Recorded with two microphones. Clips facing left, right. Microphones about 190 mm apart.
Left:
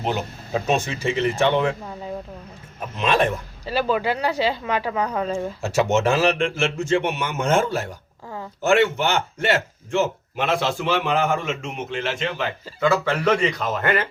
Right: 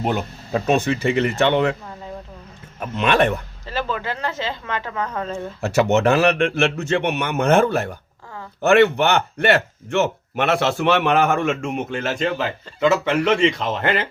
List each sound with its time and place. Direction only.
0.7 s speech: 60° right (ahead or behind)
3.0 s a man's voice: 65° right (ahead or behind)
3.7 s speech: 15° left (ahead or behind)
5.6 s speech: 60° right (ahead or behind); by 12.5 s 40° right (ahead or behind)
12.8 s speech: 25° right (ahead or behind)